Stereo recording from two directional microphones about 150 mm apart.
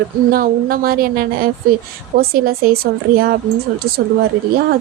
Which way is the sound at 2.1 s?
90° right.